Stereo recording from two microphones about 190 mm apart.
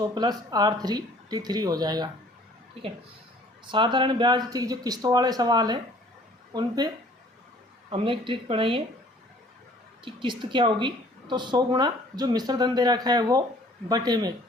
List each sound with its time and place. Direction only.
0.0 s a woman's voice: 20° right (ahead or behind)
3.7 s a woman's voice: 25° right (ahead or behind)
10.0 s a woman's voice: 25° right (ahead or behind)